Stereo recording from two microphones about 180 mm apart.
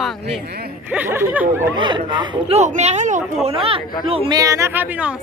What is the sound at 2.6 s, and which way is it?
Speech, 40° right (ahead or behind).